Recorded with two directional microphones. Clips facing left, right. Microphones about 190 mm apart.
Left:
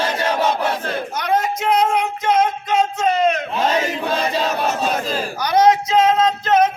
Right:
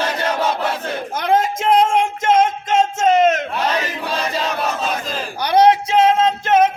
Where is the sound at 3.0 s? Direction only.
25° right (ahead or behind).